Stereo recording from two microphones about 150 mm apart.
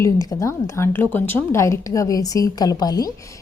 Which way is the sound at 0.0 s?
20° left (ahead or behind).